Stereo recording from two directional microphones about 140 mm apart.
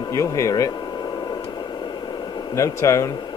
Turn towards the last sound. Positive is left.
turn(degrees=25)  # may be behind; listen again after turning